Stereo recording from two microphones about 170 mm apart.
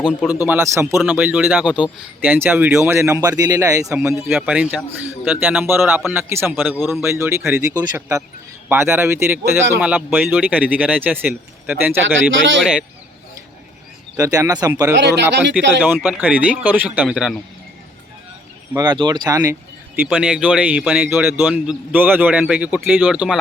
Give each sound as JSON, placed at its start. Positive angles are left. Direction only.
{"t": 0.4, "sound": "speech", "side_deg": -15}
{"t": 6.6, "sound": "speech", "side_deg": 0}
{"t": 7.0, "sound": "speech", "side_deg": -15}
{"t": 8.7, "sound": "speech", "side_deg": -15}
{"t": 14.2, "sound": "speech", "side_deg": -20}
{"t": 14.9, "sound": "speech", "side_deg": -90}
{"t": 15.5, "sound": "speech", "side_deg": -10}
{"t": 18.8, "sound": "speech", "side_deg": -25}
{"t": 20.1, "sound": "speech", "side_deg": -5}